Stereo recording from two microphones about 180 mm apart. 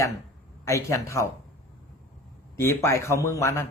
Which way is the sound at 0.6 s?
15° left (ahead or behind).